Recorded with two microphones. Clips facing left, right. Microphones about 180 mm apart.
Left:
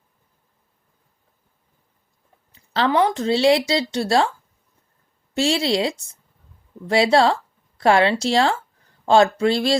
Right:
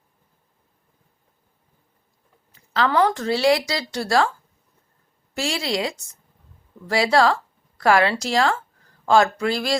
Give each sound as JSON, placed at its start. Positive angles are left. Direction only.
{"t": 2.5, "sound": "speech", "side_deg": 25}
{"t": 5.3, "sound": "speech", "side_deg": 25}